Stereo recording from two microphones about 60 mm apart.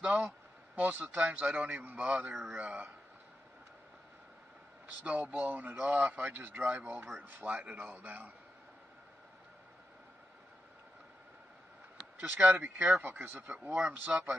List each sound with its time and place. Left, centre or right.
0.0 s a man's voice: right
1.8 s a man's voice: right
4.8 s a man's voice: right
12.2 s a man's voice: right
13.0 s a man's voice: right